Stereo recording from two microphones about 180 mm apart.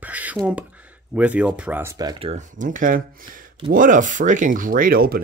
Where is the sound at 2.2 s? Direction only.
45° right (ahead or behind).